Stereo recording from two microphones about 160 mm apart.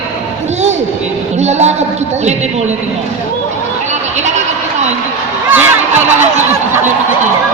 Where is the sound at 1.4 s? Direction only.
45° right (ahead or behind).